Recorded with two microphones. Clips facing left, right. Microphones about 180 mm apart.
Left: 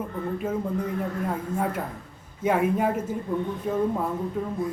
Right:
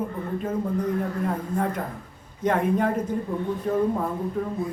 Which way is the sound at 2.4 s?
5° left (ahead or behind).